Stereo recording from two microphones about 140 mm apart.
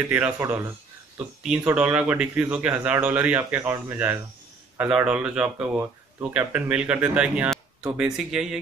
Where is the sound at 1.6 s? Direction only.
10° right (ahead or behind).